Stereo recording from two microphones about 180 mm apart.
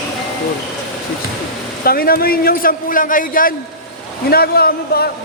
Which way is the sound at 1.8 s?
55° left (ahead or behind).